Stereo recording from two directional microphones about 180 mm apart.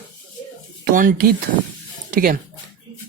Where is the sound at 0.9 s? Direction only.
50° right (ahead or behind).